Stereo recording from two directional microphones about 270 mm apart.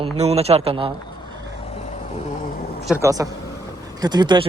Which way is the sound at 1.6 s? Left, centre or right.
Left.